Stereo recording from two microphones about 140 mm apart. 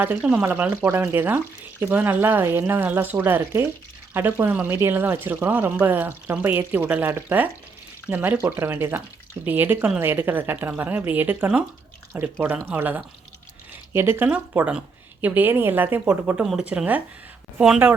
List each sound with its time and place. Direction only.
0.0 s speech: 10° right (ahead or behind)